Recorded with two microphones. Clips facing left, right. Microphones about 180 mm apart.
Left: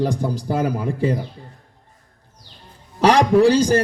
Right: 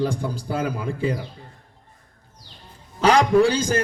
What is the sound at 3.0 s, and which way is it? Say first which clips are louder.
Speech: left 2 dB; 35° left (ahead or behind).